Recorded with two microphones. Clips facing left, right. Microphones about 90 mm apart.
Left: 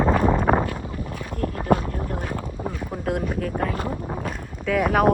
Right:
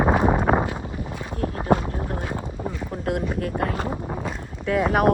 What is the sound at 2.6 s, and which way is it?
Boat, 10° left (ahead or behind).